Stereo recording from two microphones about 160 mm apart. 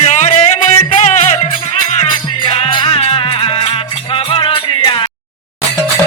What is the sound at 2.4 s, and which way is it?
Music, 30° left (ahead or behind).